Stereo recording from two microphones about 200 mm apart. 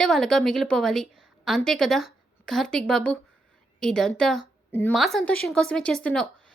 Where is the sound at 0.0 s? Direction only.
Centre (ahead or behind).